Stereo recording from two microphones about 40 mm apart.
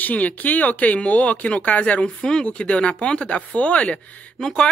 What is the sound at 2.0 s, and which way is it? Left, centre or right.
Speech, left.